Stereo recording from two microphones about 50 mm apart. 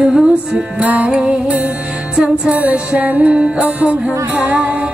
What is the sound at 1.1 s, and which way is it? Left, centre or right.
Music, centre.